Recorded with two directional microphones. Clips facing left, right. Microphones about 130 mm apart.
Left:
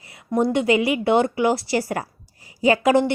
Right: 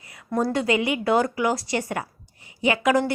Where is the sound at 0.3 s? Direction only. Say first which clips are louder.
Left 4 dB; 20° left (ahead or behind).